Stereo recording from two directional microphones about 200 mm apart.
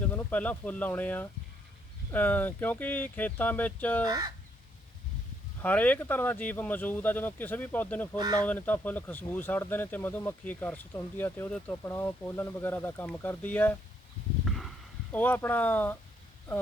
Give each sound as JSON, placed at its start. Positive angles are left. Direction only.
{"t": 0.0, "sound": "speech", "side_deg": 10}
{"t": 4.0, "sound": "speech", "side_deg": -20}
{"t": 5.6, "sound": "speech", "side_deg": 5}
{"t": 8.1, "sound": "speech", "side_deg": -20}
{"t": 8.4, "sound": "speech", "side_deg": 10}
{"t": 14.4, "sound": "a sound", "side_deg": 0}
{"t": 15.1, "sound": "speech", "side_deg": 10}